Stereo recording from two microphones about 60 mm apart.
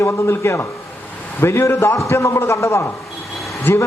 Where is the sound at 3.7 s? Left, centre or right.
Left.